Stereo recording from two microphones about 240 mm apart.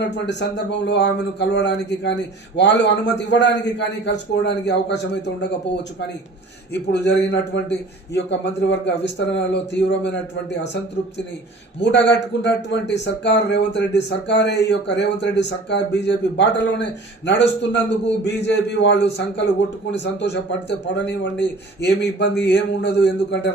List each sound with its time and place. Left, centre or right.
0.3 s speech: left
6.7 s speech: left
11.8 s speech: left